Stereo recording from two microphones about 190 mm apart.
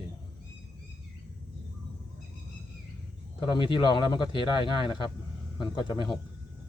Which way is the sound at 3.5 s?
25° left (ahead or behind).